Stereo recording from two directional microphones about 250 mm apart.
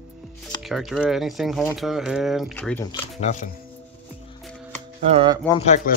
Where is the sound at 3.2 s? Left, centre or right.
Left.